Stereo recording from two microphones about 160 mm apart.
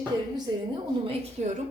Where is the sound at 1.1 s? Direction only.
45° right (ahead or behind).